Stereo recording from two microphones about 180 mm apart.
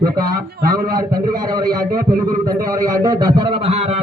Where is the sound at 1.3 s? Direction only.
20° right (ahead or behind).